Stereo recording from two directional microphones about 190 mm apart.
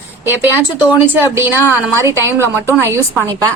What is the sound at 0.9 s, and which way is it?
A woman's voice, 10° right (ahead or behind).